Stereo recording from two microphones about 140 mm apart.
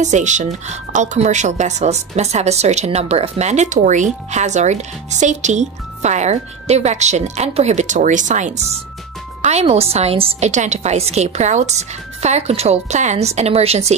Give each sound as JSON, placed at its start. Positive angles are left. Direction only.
{"t": 0.0, "sound": "a woman's voice", "side_deg": -60}
{"t": 10.5, "sound": "a woman's voice", "side_deg": -55}